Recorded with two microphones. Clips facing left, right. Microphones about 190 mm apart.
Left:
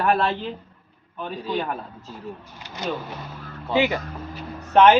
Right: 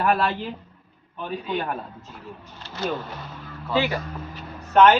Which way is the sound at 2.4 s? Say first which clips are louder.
Right 7 dB; 15° left (ahead or behind).